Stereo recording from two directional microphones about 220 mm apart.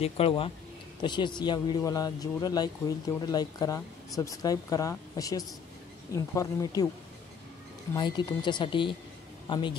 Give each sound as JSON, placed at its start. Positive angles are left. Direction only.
{"t": 0.0, "sound": "speech", "side_deg": 25}
{"t": 7.9, "sound": "speech", "side_deg": 20}